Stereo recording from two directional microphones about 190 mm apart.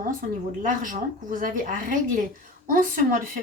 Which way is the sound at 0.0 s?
45° right (ahead or behind).